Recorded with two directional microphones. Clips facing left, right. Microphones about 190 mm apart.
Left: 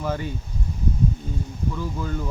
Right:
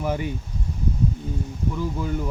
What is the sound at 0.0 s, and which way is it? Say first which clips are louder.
Speech: right 2 dB; 15° right (ahead or behind).